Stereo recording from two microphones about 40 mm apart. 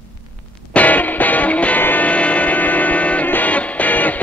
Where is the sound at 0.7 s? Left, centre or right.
Left.